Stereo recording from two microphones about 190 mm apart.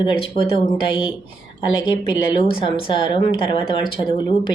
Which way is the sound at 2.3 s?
25° left (ahead or behind).